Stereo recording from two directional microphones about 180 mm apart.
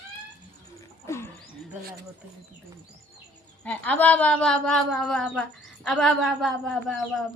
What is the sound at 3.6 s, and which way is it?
A woman's voice, 5° left (ahead or behind).